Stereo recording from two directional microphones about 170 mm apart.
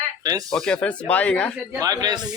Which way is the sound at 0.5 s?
5° left (ahead or behind).